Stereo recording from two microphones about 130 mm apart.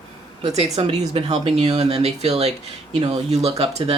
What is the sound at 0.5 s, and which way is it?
Speech, 55° right (ahead or behind).